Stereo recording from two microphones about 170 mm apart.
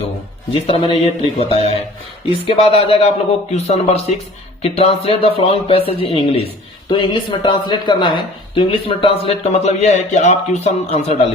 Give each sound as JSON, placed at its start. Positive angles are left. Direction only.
{"t": 0.5, "sound": "speech", "side_deg": 35}